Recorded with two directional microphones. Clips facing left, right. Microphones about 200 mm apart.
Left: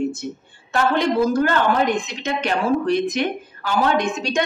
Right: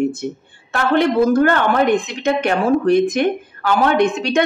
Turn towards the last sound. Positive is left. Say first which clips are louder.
# right 5 dB
turn(degrees=-60)  # may be behind; listen again after turning